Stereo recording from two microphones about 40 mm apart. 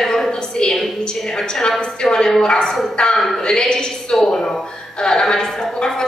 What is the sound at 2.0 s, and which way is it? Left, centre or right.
Speech, centre.